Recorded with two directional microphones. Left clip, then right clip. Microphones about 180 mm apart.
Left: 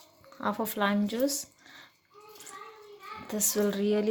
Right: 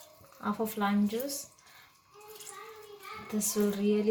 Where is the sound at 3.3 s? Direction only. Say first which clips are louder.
Left 3 dB; 65° left (ahead or behind).